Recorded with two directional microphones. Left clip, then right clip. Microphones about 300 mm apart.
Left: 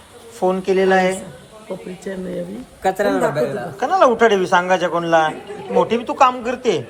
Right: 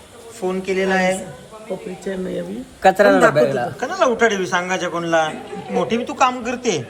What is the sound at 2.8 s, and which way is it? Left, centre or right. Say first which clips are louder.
Speech: right 5 dB; right.